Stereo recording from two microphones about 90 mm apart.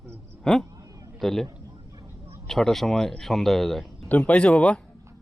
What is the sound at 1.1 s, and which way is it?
A man's voice, 5° left (ahead or behind).